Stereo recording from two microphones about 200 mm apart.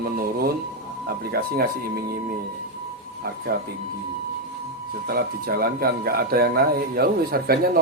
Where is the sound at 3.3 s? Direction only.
50° right (ahead or behind).